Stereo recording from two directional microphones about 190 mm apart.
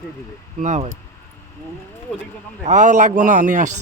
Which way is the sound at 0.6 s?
40° right (ahead or behind).